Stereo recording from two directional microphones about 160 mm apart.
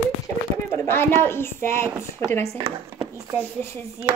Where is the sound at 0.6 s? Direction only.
15° left (ahead or behind).